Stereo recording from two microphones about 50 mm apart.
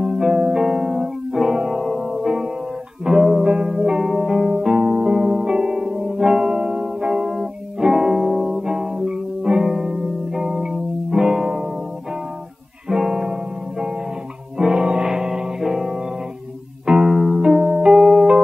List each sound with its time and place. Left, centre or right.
0.0 s music: centre
13.0 s music: centre